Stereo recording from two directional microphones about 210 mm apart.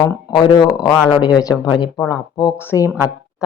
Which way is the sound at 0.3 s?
20° left (ahead or behind).